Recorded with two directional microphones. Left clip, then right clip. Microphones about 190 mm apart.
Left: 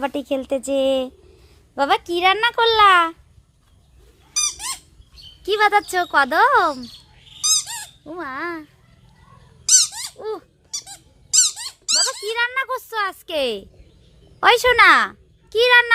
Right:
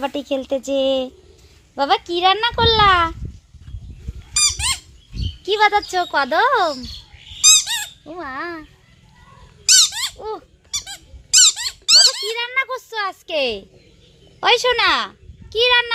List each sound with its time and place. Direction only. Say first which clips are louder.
0.0 s speech: right 1 dB; 5° left (ahead or behind)
4.4 s squeak: right 5 dB; 5° right (ahead or behind)
5.4 s speech: right 1 dB; 10° left (ahead or behind)
7.4 s squeak: right 7 dB; centre (ahead or behind)
9.7 s squeak: right 3 dB; 5° left (ahead or behind)
11.5 s speech: right 8 dB; 5° left (ahead or behind)
14.4 s a child's voice: left 3 dB; 20° left (ahead or behind)